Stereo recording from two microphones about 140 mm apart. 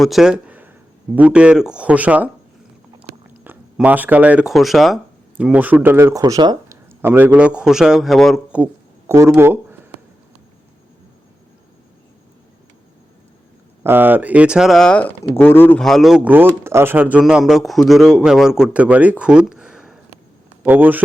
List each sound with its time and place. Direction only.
0.0 s speech: centre (ahead or behind)
3.4 s speech: 10° right (ahead or behind)
7.0 s a man's voice: 15° right (ahead or behind)
8.5 s a sound: 15° right (ahead or behind)
13.8 s speech: 15° right (ahead or behind); by 15.8 s 15° left (ahead or behind)
15.8 s a man's voice: centre (ahead or behind)